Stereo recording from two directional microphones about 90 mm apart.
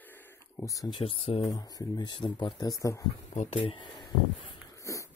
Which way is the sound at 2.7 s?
40° left (ahead or behind).